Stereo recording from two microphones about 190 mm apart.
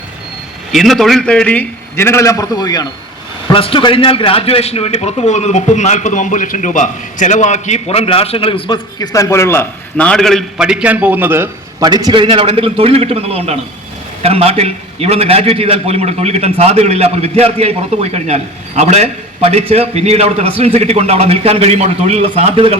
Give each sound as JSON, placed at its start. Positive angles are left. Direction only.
{"t": 0.7, "sound": "a man's voice", "side_deg": 0}